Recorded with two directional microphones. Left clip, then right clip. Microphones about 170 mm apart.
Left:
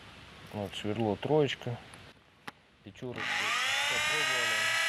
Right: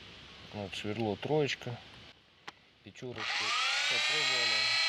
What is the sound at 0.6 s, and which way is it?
Speech, 10° left (ahead or behind).